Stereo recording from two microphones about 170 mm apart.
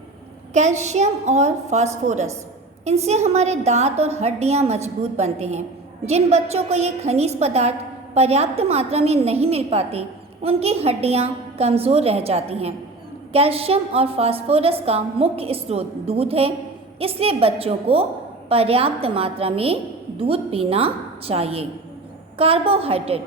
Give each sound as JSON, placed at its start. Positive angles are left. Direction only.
{"t": 0.5, "sound": "a woman's voice", "side_deg": -45}